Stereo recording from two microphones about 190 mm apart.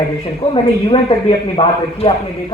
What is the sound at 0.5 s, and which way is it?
A man's voice, 25° left (ahead or behind).